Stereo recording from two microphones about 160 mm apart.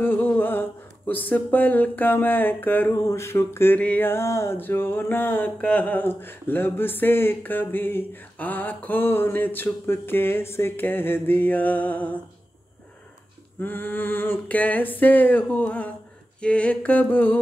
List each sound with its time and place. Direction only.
0.0 s speech: 10° left (ahead or behind)
13.6 s speech: 10° left (ahead or behind)